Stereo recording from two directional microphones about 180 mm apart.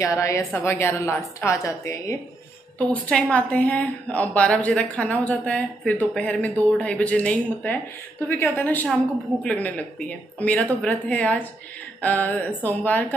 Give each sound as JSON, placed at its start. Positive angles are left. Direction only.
{"t": 0.0, "sound": "a woman's voice", "side_deg": 15}
{"t": 2.8, "sound": "a woman's voice", "side_deg": 5}